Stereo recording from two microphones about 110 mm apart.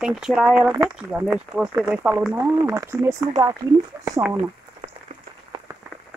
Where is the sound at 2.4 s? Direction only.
25° right (ahead or behind).